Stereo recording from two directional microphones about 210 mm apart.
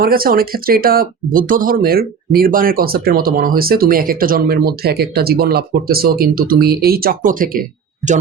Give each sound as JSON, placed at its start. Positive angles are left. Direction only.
{"t": 0.0, "sound": "speech", "side_deg": -45}